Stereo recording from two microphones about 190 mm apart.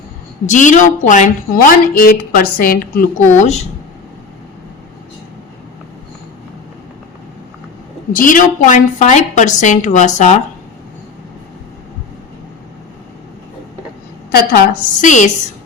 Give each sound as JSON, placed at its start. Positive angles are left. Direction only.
{"t": 0.4, "sound": "a woman's voice", "side_deg": 40}
{"t": 8.1, "sound": "a woman's voice", "side_deg": 45}
{"t": 14.3, "sound": "a woman's voice", "side_deg": 55}
{"t": 15.0, "sound": "a woman's voice", "side_deg": 40}